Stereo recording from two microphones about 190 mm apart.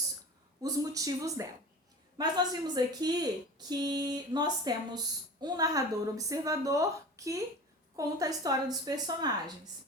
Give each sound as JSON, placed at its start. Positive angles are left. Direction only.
{"t": 0.6, "sound": "speech", "side_deg": -20}